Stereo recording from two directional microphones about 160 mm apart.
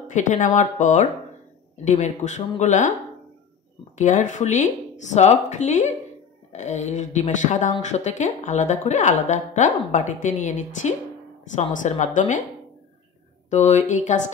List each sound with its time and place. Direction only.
0.0 s a woman's voice: 50° left (ahead or behind)
4.0 s a woman's voice: 50° left (ahead or behind)
13.5 s a woman's voice: 45° left (ahead or behind)